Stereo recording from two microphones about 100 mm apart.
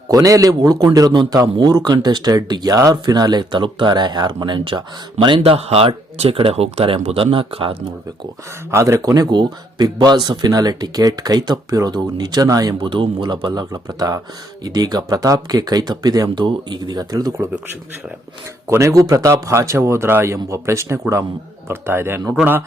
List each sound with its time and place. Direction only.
0.1 s a man's voice: 35° right (ahead or behind); by 4.8 s 55° right (ahead or behind)
5.4 s speech: 85° right; by 7.8 s 65° right (ahead or behind)
8.7 s a man's voice: 30° right (ahead or behind)
12.8 s a man's voice: 55° right (ahead or behind)
18.7 s speech: 30° right (ahead or behind)